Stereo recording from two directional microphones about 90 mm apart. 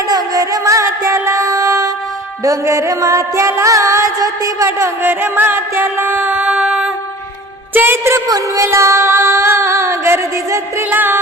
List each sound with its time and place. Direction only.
0.1 s music: 40° right (ahead or behind)
2.4 s female singing: 35° right (ahead or behind)
5.0 s music: 20° right (ahead or behind)
7.7 s a woman's voice: 25° right (ahead or behind)
8.3 s female singing: 35° right (ahead or behind)